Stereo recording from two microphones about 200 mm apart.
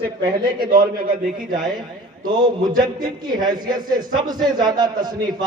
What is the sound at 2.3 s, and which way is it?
A man's voice, 20° right (ahead or behind).